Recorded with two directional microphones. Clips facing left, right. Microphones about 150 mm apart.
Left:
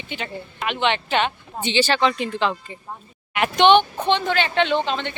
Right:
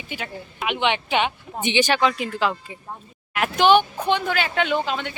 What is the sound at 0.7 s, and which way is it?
Speech, 10° right (ahead or behind).